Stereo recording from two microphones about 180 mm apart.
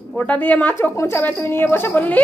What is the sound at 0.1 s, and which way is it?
A woman's voice, 10° left (ahead or behind).